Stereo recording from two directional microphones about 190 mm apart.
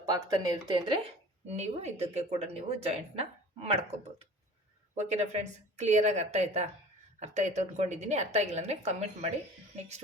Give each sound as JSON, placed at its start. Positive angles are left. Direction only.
{"t": 0.0, "sound": "a woman's voice", "side_deg": -20}
{"t": 4.9, "sound": "a woman's voice", "side_deg": -35}